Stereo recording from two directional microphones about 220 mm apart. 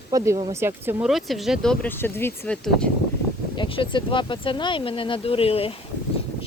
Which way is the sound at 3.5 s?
20° left (ahead or behind).